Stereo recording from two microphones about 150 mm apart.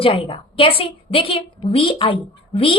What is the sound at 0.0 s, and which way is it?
A woman's voice, 35° left (ahead or behind).